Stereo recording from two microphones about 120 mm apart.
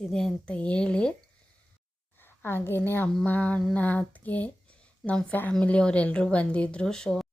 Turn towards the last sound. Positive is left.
turn(degrees=5)  # may be behind; listen again after turning